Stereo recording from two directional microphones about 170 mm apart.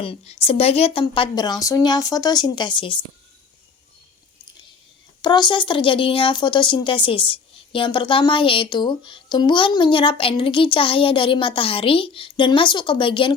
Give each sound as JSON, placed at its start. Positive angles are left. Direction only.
{"t": 0.0, "sound": "a woman's voice", "side_deg": 35}
{"t": 5.2, "sound": "a woman's voice", "side_deg": 25}